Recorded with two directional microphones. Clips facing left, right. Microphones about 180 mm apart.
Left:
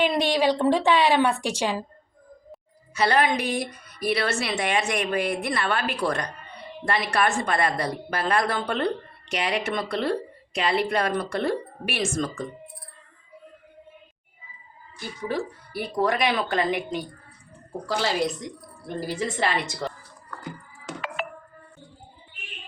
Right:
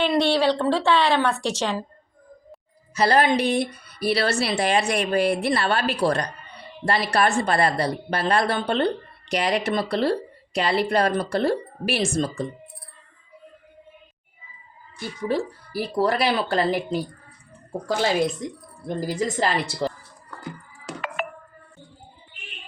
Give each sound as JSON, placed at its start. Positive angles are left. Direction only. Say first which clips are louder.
{"t": 0.0, "sound": "speech", "louder": "right 2 dB", "side_deg": 15}
{"t": 2.9, "sound": "a woman's voice", "louder": "right 3 dB", "side_deg": -35}
{"t": 15.3, "sound": "a woman's voice", "louder": "right 4 dB", "side_deg": -35}
{"t": 17.8, "sound": "a woman's voice", "louder": "right 3 dB", "side_deg": -55}
{"t": 18.9, "sound": "a woman's voice", "louder": "right 3 dB", "side_deg": -40}
{"t": 21.2, "sound": "music", "louder": "right 3 dB", "side_deg": -50}